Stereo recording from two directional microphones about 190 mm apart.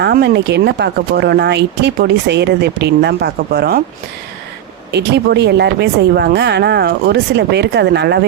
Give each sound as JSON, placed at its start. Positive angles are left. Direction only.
{"t": 0.0, "sound": "speech", "side_deg": -60}
{"t": 4.9, "sound": "speech", "side_deg": -60}